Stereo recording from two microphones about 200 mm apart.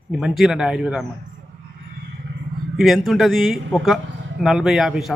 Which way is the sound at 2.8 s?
Centre (ahead or behind).